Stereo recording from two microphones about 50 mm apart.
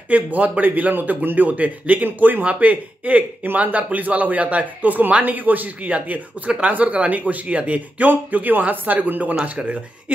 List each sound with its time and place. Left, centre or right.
0.1 s speech: right